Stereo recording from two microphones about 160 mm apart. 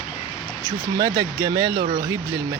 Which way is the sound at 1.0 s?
25° right (ahead or behind).